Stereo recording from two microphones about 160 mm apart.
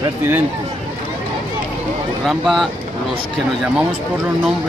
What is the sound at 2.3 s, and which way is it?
Speech, centre (ahead or behind).